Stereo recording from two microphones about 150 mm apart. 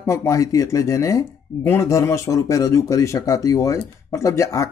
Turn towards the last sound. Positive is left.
turn(degrees=20)  # may be behind; listen again after turning